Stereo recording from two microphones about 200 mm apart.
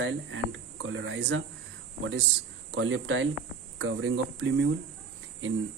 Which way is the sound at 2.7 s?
80° right.